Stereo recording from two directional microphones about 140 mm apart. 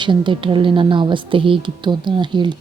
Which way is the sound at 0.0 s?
35° right (ahead or behind).